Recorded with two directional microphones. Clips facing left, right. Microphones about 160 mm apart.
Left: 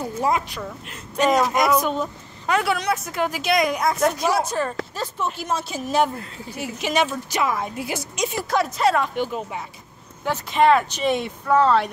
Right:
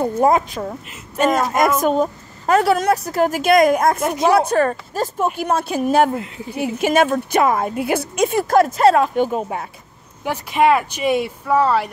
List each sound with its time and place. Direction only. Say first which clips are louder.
0.0 s a woman's voice: right 7 dB; 50° right (ahead or behind)
4.9 s a woman's voice: right 7 dB; 45° right (ahead or behind)
10.2 s speech: right 2 dB; 10° right (ahead or behind)